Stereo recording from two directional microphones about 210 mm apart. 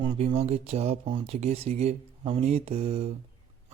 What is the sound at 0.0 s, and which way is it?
Speech, 25° right (ahead or behind).